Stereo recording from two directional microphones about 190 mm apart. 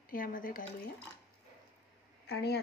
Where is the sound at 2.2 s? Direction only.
60° left (ahead or behind).